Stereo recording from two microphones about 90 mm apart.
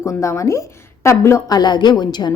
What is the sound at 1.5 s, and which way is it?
Speech, 50° left (ahead or behind).